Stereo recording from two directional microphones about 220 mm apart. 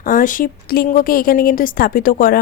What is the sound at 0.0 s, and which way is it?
A woman's voice, 40° left (ahead or behind).